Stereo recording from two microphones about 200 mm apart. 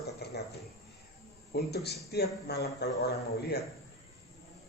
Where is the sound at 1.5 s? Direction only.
55° left (ahead or behind).